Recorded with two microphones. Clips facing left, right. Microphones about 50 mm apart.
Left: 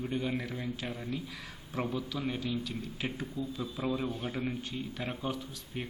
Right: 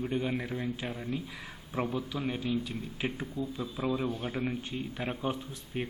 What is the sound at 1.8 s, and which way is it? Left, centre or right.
A man's voice, right.